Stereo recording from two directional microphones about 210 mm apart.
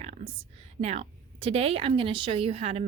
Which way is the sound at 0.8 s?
30° right (ahead or behind).